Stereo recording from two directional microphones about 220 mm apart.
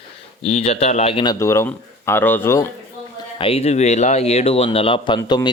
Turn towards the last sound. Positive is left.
turn(degrees=20)  # may be behind; listen again after turning